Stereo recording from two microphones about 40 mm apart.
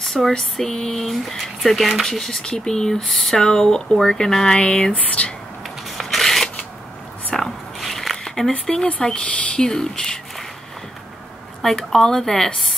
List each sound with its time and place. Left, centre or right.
0.0 s a sound: centre
0.4 s speech: centre
2.4 s speech: left
4.9 s speech: left
5.9 s zipper: centre
7.3 s a sound: centre
7.8 s a sound: centre
9.0 s speech: left
11.9 s speech: centre